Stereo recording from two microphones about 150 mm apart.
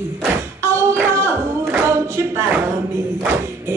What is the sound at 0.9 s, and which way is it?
Singing, 15° right (ahead or behind).